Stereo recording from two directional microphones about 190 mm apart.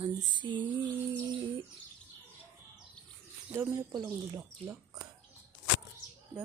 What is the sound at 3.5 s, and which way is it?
Speech, 10° right (ahead or behind).